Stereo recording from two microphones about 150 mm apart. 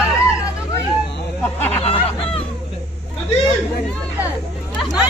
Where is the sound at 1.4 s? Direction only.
10° left (ahead or behind).